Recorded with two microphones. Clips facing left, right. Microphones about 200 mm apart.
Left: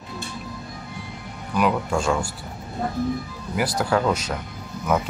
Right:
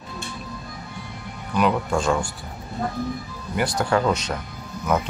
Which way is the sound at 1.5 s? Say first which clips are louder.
Right 1 dB; 5° left (ahead or behind).